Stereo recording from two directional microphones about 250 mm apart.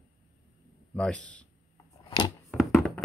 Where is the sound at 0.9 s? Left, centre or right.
Centre.